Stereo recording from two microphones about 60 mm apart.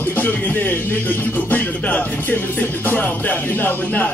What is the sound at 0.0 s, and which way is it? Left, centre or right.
Speech, left.